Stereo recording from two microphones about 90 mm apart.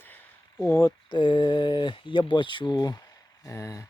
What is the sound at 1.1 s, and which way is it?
Speech, 65° left (ahead or behind).